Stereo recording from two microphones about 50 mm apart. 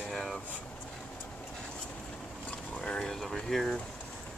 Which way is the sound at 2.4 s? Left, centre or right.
Left.